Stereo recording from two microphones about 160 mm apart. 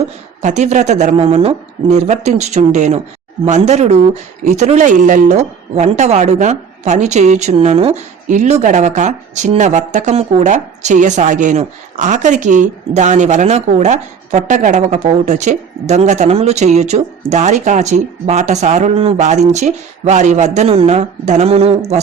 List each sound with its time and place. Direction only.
0.4 s speech: 45° right (ahead or behind)